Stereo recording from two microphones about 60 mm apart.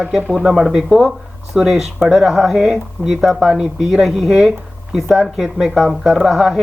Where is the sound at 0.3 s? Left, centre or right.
Centre.